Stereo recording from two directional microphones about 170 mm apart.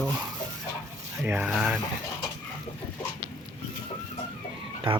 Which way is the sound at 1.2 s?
10° right (ahead or behind).